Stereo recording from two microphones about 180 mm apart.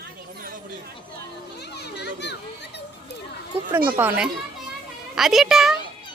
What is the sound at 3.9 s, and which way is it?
A child's voice, 10° right (ahead or behind).